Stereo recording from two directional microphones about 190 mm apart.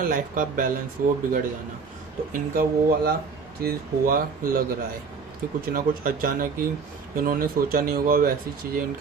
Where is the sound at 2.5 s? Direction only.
50° right (ahead or behind).